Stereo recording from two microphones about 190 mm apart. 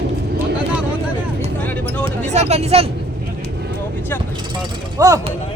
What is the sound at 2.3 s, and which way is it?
Speech, 35° right (ahead or behind).